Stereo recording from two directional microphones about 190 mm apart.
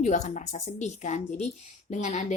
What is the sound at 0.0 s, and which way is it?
Speech, 40° left (ahead or behind).